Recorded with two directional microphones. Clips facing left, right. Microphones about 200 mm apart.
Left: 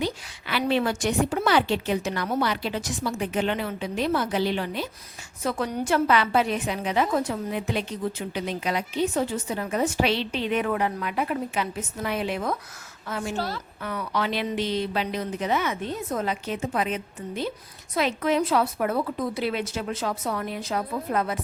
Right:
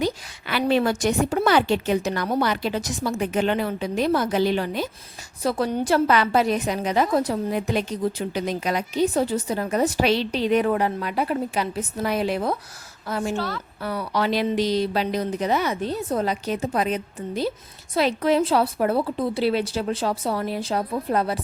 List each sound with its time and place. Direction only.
0.0 s a woman's voice: 45° right (ahead or behind)
13.3 s a woman's voice: 35° left (ahead or behind)
13.8 s a woman's voice: 35° right (ahead or behind)